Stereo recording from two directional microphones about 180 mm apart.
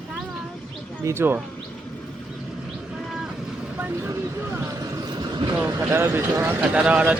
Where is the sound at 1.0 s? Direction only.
15° right (ahead or behind).